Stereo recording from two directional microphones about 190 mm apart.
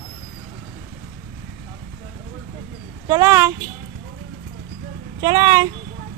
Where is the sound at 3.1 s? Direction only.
15° right (ahead or behind).